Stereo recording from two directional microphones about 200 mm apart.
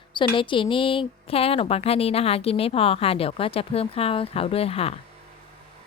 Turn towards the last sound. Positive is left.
turn(degrees=30)  # may be behind; listen again after turning